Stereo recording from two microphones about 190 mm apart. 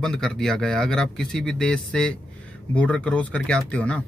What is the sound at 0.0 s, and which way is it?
Speech, 5° left (ahead or behind).